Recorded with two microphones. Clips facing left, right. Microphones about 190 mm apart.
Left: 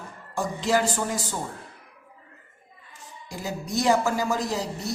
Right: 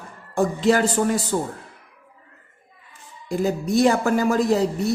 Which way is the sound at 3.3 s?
55° right (ahead or behind).